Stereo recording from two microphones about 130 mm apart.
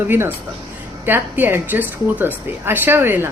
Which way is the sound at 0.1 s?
15° right (ahead or behind).